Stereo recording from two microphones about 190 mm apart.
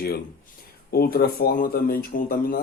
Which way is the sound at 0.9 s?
55° left (ahead or behind).